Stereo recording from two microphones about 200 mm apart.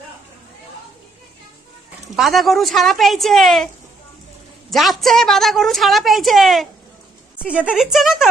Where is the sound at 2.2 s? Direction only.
Centre (ahead or behind).